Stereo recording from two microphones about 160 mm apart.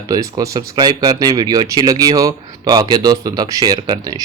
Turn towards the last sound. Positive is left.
turn(degrees=-25)  # may be behind; listen again after turning